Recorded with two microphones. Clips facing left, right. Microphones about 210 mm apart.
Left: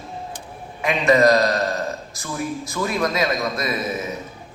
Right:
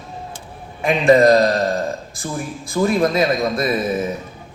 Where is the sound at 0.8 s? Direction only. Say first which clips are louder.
Right 4 dB; 30° right (ahead or behind).